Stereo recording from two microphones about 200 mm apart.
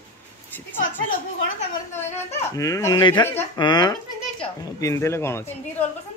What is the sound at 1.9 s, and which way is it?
Speech, 10° left (ahead or behind).